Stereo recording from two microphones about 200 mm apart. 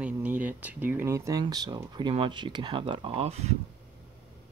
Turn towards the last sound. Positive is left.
turn(degrees=-30)  # may be behind; listen again after turning